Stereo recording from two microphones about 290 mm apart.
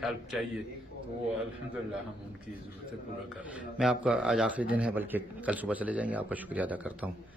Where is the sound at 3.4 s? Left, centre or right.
Centre.